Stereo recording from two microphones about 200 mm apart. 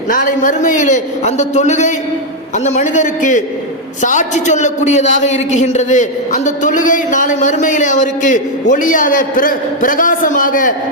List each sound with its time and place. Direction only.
0.1 s a man's voice: 40° left (ahead or behind)